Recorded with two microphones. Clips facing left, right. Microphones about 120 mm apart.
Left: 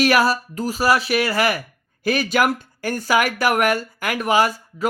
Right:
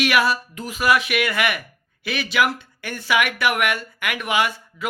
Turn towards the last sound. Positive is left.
turn(degrees=40)  # may be behind; listen again after turning